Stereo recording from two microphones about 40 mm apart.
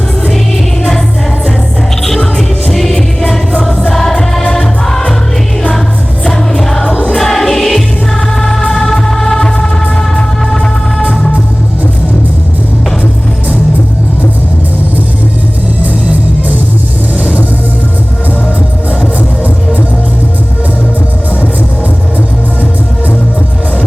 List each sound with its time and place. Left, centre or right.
2.0 s music: centre
6.2 s music: centre
6.8 s music: left
7.2 s music: centre